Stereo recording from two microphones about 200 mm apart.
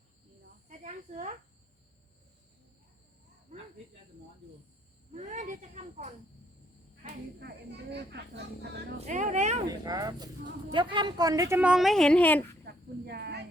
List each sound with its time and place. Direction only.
0.7 s cricket: 35° right (ahead or behind)
5.1 s speech: 35° right (ahead or behind)
7.0 s speech: 55° right (ahead or behind)
9.0 s speech: 35° right (ahead or behind)
9.6 s speech: 20° right (ahead or behind); by 12.4 s 5° left (ahead or behind)
12.6 s a sound: 55° right (ahead or behind)